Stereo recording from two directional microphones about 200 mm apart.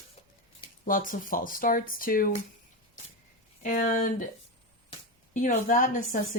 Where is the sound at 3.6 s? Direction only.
40° left (ahead or behind).